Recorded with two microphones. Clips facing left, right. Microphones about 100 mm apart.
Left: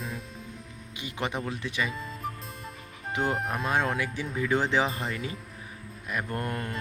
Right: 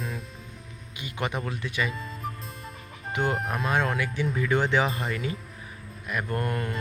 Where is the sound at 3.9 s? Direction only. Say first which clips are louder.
Right 3 dB; 35° left (ahead or behind).